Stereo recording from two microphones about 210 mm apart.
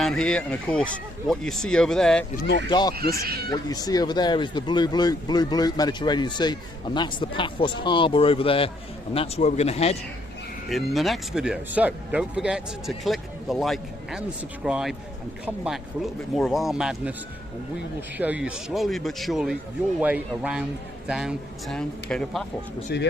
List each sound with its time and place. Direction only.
0.0 s speech: 5° left (ahead or behind)
2.6 s speech: 20° left (ahead or behind)
2.9 s speech: 45° right (ahead or behind)
3.5 s speech: 20° left (ahead or behind)
10.9 s speech: centre (ahead or behind)
18.2 s speech: 5° right (ahead or behind)
22.9 s speech: 50° left (ahead or behind)